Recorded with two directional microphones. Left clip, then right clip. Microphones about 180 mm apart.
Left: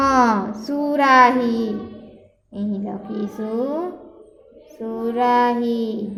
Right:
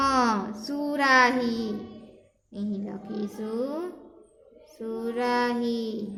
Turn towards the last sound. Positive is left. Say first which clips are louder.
# left 7 dB
turn(degrees=5)  # may be behind; listen again after turning